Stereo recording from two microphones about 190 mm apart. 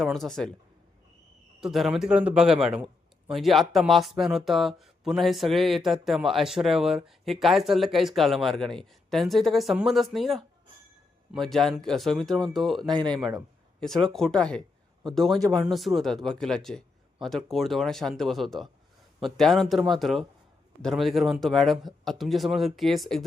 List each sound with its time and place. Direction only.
0.0 s a man's voice: centre (ahead or behind)
1.6 s a man's voice: centre (ahead or behind)
13.0 s speech: 25° right (ahead or behind)
13.7 s a man's voice: centre (ahead or behind)